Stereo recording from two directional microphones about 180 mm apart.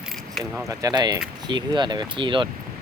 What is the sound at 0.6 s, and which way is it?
Speech, 20° right (ahead or behind).